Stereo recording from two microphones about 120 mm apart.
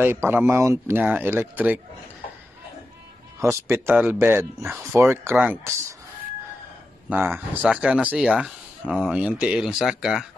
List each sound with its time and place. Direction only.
0.0 s speech: 15° right (ahead or behind)
3.3 s speech: 25° right (ahead or behind)
7.1 s speech: 15° right (ahead or behind)